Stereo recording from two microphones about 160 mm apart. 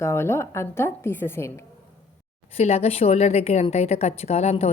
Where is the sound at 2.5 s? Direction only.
40° left (ahead or behind).